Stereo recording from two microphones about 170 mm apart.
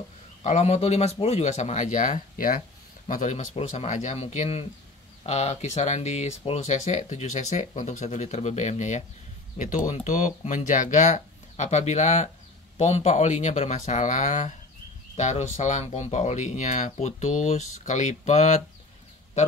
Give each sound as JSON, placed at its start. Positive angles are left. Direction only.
{"t": 0.4, "sound": "speech", "side_deg": 40}
{"t": 3.1, "sound": "speech", "side_deg": 45}